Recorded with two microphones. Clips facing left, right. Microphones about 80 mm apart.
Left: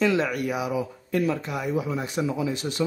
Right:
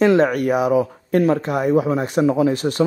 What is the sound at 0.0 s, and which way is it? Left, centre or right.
Speech, right.